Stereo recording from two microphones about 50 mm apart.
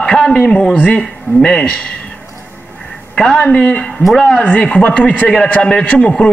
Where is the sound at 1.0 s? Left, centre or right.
Centre.